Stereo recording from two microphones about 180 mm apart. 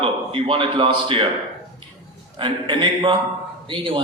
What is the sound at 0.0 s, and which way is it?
A man's voice, 30° right (ahead or behind).